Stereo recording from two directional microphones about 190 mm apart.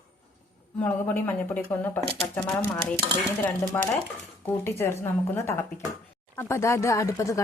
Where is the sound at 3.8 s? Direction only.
10° left (ahead or behind).